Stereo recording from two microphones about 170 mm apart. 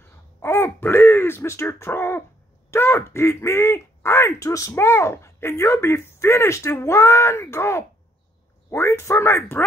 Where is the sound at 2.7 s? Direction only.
15° left (ahead or behind).